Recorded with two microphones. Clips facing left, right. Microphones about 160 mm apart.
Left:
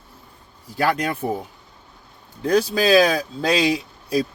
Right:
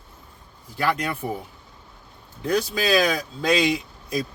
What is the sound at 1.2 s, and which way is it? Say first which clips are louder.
Speech: left 6 dB; 35° left (ahead or behind).